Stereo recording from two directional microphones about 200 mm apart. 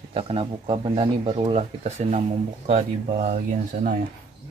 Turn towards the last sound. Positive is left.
turn(degrees=-40)  # may be behind; listen again after turning